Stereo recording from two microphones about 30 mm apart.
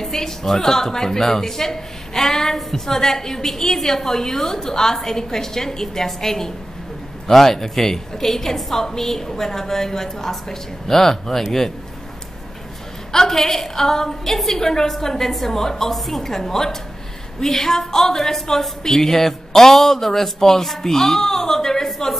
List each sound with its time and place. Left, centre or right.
0.0 s speech: centre
13.1 s speech: centre